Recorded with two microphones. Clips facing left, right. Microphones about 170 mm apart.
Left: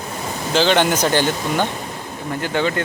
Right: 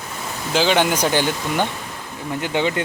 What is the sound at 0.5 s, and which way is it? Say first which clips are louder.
Speech: left 1 dB; 10° right (ahead or behind).